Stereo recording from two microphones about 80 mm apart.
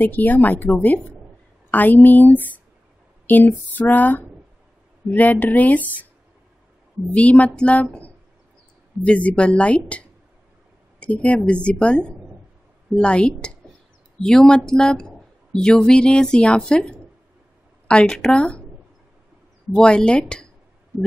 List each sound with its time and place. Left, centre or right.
0.0 s speech: left
3.3 s a sound: left
3.7 s speech: left
7.2 s speech: centre
19.7 s speech: centre